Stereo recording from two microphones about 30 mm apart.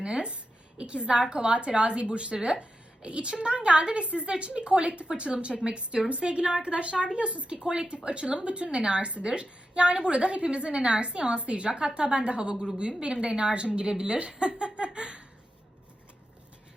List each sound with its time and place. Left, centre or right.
0.8 s a woman's voice: right